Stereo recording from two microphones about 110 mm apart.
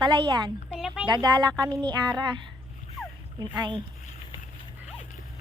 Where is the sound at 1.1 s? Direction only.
40° right (ahead or behind).